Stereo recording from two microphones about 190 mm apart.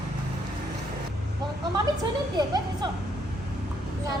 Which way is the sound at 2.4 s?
20° right (ahead or behind).